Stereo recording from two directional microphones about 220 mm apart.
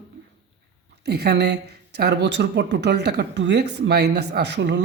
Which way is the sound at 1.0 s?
50° right (ahead or behind).